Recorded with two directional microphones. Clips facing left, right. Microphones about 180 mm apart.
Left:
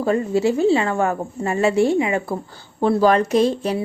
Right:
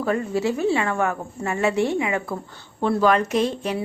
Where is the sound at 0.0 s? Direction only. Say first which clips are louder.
Left 4 dB; 25° left (ahead or behind).